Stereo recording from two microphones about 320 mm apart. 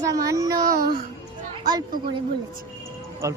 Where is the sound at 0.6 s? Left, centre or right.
Right.